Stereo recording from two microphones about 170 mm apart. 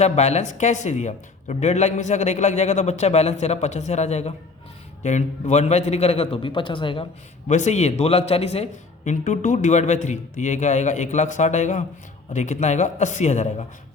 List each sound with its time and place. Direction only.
0.0 s speech: 40° left (ahead or behind)
7.5 s speech: 40° left (ahead or behind)